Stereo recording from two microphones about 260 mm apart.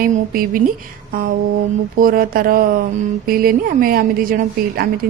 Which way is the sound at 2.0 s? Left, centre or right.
Right.